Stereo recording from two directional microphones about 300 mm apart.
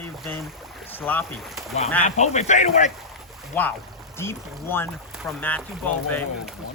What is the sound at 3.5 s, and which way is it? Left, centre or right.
Speech, centre.